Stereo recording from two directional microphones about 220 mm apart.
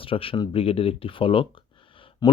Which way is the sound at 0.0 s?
25° left (ahead or behind).